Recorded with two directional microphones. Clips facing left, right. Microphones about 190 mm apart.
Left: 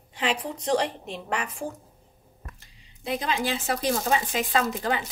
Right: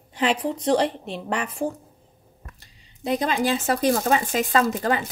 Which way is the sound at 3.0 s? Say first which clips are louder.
Right 5 dB; 40° right (ahead or behind).